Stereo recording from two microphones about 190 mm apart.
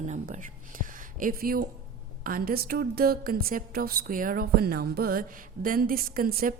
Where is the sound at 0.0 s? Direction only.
40° right (ahead or behind).